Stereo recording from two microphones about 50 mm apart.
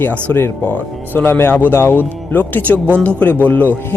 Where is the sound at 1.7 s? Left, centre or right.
Left.